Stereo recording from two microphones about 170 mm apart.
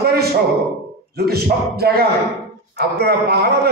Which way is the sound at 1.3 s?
65° right (ahead or behind).